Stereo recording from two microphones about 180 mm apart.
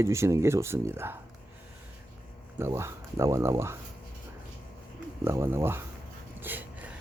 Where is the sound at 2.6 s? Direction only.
15° right (ahead or behind).